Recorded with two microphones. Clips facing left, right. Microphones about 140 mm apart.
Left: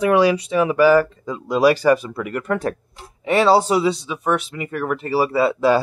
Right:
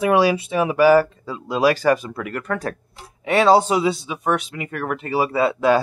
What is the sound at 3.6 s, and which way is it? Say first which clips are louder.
Speech: left 1 dB; 10° right (ahead or behind).